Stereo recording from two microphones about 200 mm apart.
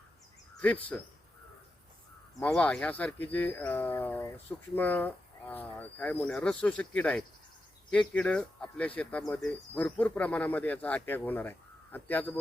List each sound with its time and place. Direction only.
0.6 s speech: 5° left (ahead or behind)
2.4 s speech: 5° left (ahead or behind)